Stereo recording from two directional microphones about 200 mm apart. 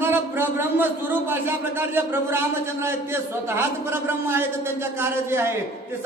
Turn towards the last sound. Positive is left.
turn(degrees=-10)  # may be behind; listen again after turning